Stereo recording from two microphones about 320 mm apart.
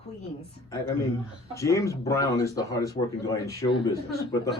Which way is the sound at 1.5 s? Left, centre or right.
Centre.